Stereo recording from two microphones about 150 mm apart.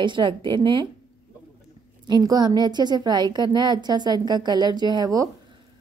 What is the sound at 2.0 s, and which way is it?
A woman's voice, 25° right (ahead or behind).